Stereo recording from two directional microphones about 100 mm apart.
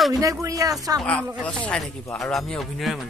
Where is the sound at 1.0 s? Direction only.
10° left (ahead or behind).